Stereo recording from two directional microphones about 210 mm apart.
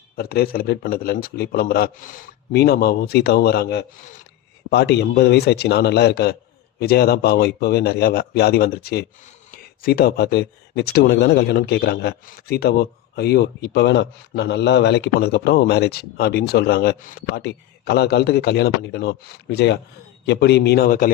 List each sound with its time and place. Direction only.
0.2 s speech: 45° left (ahead or behind)